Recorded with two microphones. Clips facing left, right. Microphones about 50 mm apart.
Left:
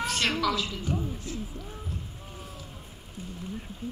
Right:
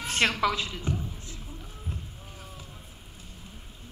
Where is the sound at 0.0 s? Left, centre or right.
Right.